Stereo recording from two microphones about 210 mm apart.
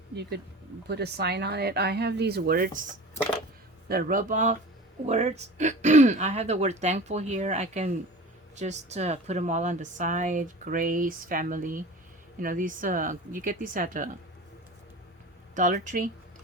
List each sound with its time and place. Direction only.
0.9 s speech: 50° right (ahead or behind)
15.5 s speech: 35° right (ahead or behind)